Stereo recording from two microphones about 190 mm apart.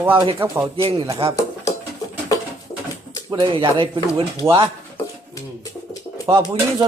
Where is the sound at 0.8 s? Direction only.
30° right (ahead or behind).